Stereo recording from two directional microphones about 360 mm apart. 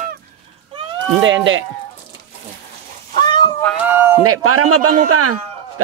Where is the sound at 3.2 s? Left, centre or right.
Centre.